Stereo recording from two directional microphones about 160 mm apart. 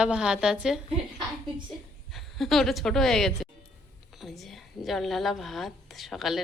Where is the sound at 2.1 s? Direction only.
Centre (ahead or behind).